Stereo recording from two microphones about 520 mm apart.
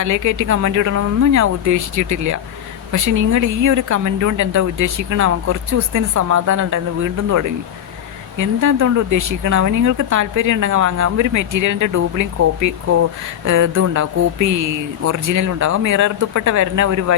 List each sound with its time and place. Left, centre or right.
0.0 s speech: right